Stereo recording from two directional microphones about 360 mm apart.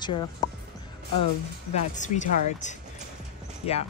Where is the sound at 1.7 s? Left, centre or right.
Centre.